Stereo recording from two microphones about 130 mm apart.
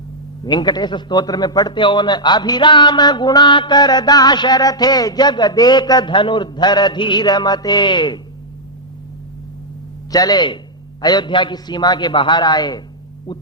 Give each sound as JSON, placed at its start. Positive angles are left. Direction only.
{"t": 0.4, "sound": "a man's voice", "side_deg": 35}
{"t": 10.1, "sound": "a man's voice", "side_deg": 30}